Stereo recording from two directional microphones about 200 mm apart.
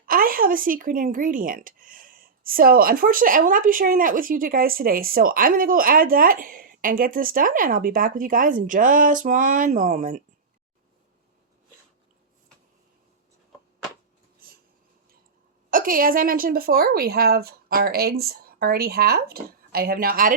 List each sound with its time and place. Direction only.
0.0 s speech: 45° right (ahead or behind)
15.7 s speech: 45° right (ahead or behind)